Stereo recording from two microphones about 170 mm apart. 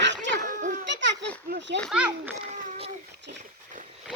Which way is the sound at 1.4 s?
75° right (ahead or behind).